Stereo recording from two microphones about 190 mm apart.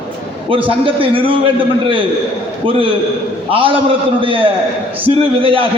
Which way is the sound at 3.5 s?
25° right (ahead or behind).